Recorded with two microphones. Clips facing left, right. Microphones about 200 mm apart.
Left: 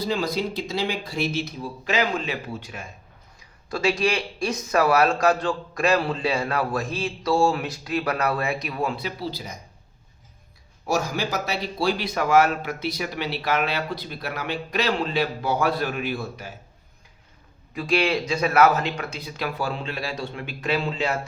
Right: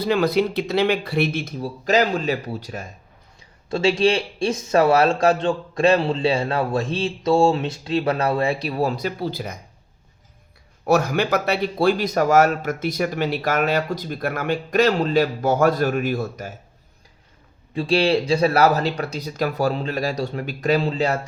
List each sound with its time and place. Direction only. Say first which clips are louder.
0.0 s speech: right 6 dB; 60° right (ahead or behind)
1.6 s speech: right 7 dB; 40° right (ahead or behind)
3.7 s a man's voice: right 5 dB; 25° right (ahead or behind); by 9.6 s 55° right (ahead or behind)
10.8 s a man's voice: right 6 dB; 60° right (ahead or behind); by 16.6 s 45° right (ahead or behind)
17.7 s speech: right 4 dB; 30° right (ahead or behind)